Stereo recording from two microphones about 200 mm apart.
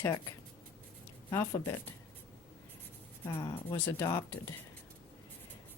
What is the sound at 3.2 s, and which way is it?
Speech, 20° left (ahead or behind).